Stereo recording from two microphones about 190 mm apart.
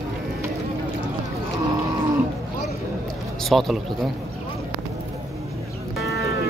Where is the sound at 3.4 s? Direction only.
Centre (ahead or behind).